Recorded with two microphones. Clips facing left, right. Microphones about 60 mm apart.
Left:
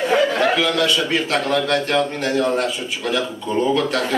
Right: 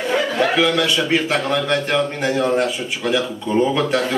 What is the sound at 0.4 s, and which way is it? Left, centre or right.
A man's voice, centre.